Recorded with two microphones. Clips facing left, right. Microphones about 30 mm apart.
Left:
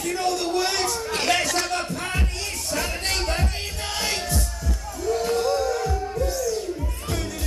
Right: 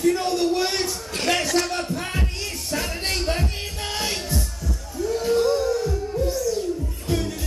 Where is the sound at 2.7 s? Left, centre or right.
Centre.